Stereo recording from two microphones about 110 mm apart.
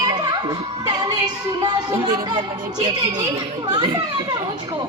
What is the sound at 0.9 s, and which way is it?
A man's voice, 35° right (ahead or behind).